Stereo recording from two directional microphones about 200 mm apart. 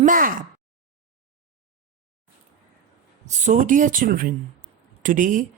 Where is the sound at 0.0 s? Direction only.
45° right (ahead or behind).